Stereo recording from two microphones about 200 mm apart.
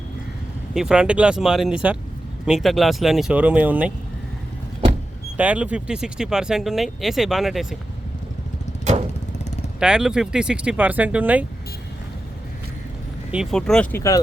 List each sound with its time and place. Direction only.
0.7 s speech: centre (ahead or behind)
5.4 s speech: 5° right (ahead or behind)
8.8 s a sound: 35° right (ahead or behind)
9.8 s speech: 5° right (ahead or behind)
13.3 s speech: centre (ahead or behind)